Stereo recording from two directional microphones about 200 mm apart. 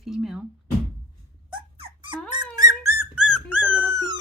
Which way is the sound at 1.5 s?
25° right (ahead or behind).